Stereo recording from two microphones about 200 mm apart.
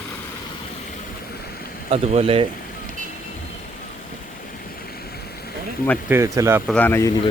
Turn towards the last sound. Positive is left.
turn(degrees=10)  # may be behind; listen again after turning